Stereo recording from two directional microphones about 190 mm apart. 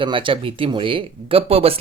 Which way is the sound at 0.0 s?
25° right (ahead or behind).